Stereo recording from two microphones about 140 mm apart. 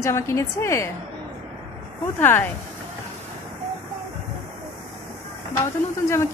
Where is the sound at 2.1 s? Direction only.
15° left (ahead or behind).